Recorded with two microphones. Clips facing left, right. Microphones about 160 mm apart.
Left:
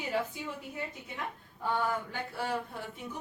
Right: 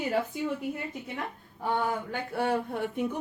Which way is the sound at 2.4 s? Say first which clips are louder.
Right 8 dB; 60° right (ahead or behind).